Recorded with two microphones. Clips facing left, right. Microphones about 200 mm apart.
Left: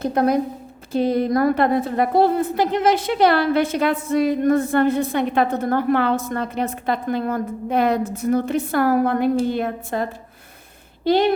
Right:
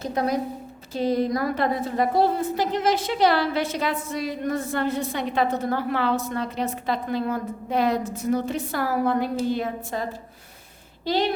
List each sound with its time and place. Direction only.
0.0 s a woman's voice: 55° left (ahead or behind)